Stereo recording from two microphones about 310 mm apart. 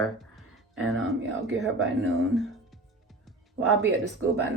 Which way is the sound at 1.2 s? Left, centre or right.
Right.